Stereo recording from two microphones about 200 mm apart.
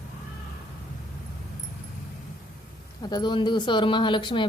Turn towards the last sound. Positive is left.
turn(degrees=25)  # may be behind; listen again after turning